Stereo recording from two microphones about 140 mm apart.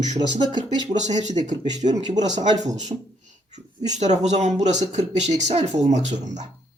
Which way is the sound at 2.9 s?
35° right (ahead or behind).